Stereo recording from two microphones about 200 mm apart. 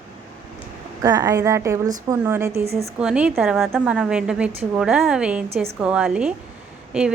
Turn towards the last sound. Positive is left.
turn(degrees=-5)  # may be behind; listen again after turning